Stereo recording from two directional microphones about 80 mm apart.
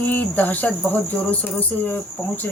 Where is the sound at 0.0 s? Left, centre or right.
Left.